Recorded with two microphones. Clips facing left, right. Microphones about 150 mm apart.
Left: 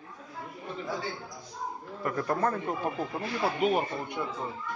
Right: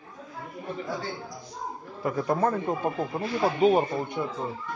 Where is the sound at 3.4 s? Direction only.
30° right (ahead or behind).